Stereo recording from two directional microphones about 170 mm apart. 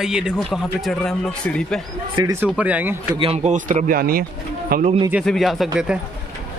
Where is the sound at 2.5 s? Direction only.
10° right (ahead or behind).